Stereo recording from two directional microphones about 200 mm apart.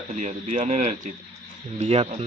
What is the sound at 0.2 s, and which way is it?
Speech, 35° right (ahead or behind).